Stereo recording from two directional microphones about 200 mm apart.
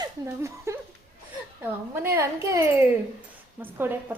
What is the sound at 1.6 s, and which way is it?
A woman's voice, 10° right (ahead or behind).